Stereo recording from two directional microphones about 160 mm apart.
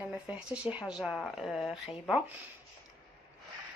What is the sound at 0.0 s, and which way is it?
Speech, 5° right (ahead or behind).